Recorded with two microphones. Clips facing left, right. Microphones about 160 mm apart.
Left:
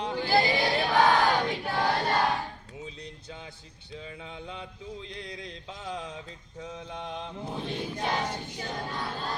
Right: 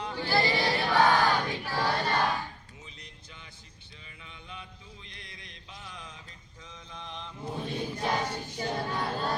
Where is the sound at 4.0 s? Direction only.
90° left; by 7.3 s 50° left (ahead or behind).